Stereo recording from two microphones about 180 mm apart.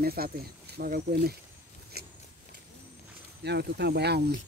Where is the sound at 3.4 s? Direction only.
65° right (ahead or behind).